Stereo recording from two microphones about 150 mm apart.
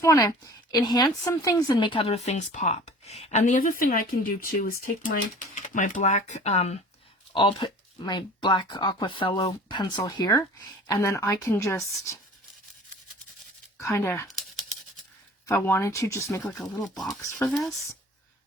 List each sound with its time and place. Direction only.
0.0 s speech: 20° left (ahead or behind); by 6.7 s 45° left (ahead or behind)
7.3 s speech: 30° left (ahead or behind)
13.7 s speech: 20° left (ahead or behind)
15.4 s speech: 15° left (ahead or behind)
16.5 s speech: 5° left (ahead or behind)
17.2 s speech: 15° left (ahead or behind)
17.5 s speech: centre (ahead or behind)